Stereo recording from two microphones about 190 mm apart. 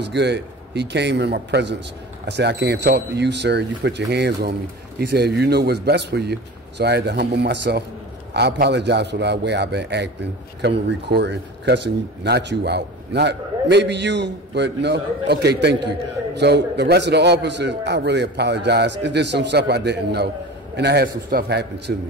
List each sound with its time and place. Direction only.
0.0 s speech: 65° right (ahead or behind)